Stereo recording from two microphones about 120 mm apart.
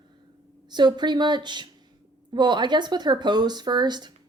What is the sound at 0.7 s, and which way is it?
A woman's voice, 35° right (ahead or behind).